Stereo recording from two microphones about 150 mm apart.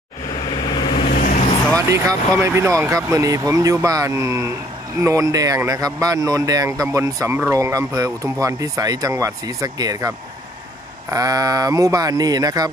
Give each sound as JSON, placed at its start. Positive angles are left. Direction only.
{"t": 0.5, "sound": "vehicle", "side_deg": 30}
{"t": 1.1, "sound": "vehicle", "side_deg": 65}
{"t": 1.8, "sound": "speech", "side_deg": -20}